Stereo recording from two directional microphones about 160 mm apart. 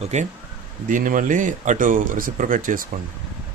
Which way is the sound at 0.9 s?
55° right (ahead or behind).